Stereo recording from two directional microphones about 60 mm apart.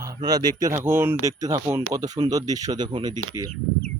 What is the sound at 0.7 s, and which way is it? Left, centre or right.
Speech, right.